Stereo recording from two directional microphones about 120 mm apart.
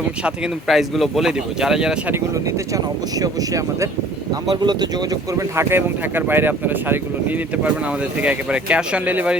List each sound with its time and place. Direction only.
0.3 s speech: centre (ahead or behind)
2.7 s speech: 30° right (ahead or behind)
5.3 s speech: 25° right (ahead or behind)